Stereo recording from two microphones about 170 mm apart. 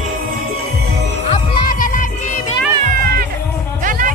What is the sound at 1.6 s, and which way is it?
Music, 55° left (ahead or behind).